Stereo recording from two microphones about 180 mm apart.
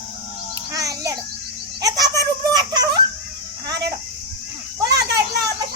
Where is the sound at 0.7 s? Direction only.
20° right (ahead or behind).